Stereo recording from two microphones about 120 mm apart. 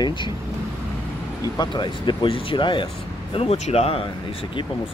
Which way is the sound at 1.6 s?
40° left (ahead or behind).